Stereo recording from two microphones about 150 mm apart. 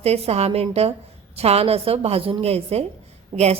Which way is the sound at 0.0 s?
45° right (ahead or behind).